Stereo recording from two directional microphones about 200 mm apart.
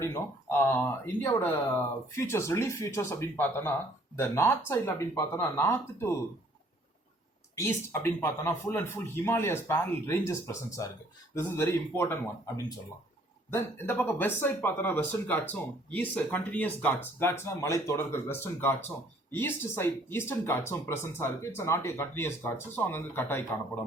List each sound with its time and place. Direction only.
0.0 s speech: 15° left (ahead or behind)
8.0 s speech: 10° left (ahead or behind)
13.5 s speech: 10° left (ahead or behind)